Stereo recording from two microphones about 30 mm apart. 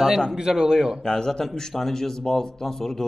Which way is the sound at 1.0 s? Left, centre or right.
Left.